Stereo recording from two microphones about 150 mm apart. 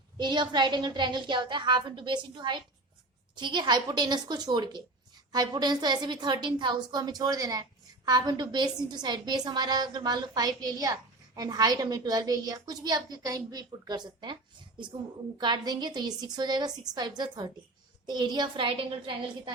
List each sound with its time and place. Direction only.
0.2 s a woman's voice: 30° right (ahead or behind)
15.4 s a woman's voice: 30° right (ahead or behind)